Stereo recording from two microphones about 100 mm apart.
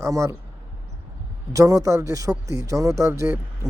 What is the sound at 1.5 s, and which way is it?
Speech, 35° right (ahead or behind).